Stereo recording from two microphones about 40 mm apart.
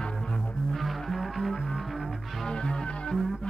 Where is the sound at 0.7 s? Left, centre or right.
Centre.